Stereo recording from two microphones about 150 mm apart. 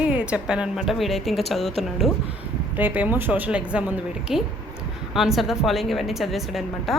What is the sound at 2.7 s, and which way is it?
A woman's voice, 10° right (ahead or behind).